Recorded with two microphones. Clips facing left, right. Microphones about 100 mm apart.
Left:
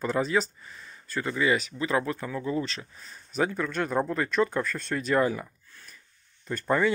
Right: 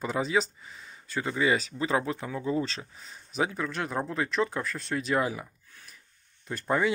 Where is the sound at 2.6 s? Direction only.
30° right (ahead or behind).